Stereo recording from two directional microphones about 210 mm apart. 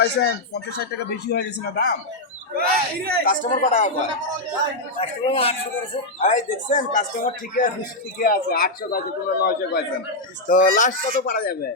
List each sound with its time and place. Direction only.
0.0 s a man's voice: 50° left (ahead or behind)
2.6 s speech: 45° right (ahead or behind)
3.2 s a man's voice: 35° left (ahead or behind)
4.9 s a man's voice: 25° left (ahead or behind); by 9.8 s 45° left (ahead or behind)
10.5 s a man's voice: 35° left (ahead or behind)